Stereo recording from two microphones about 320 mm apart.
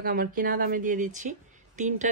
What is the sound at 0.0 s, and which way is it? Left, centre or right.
Speech, right.